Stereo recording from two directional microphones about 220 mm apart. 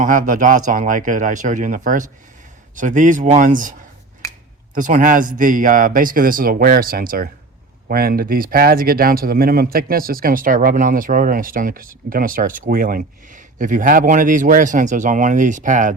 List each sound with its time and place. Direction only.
0.0 s speech: 40° right (ahead or behind)